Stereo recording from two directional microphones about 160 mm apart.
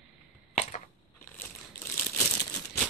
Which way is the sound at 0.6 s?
50° left (ahead or behind).